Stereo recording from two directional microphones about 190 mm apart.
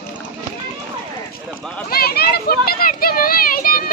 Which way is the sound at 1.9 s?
55° left (ahead or behind).